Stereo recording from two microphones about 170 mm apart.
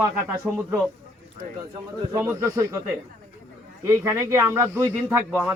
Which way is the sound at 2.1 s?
15° right (ahead or behind).